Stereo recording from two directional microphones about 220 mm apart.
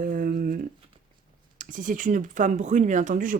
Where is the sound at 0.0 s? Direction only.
40° right (ahead or behind).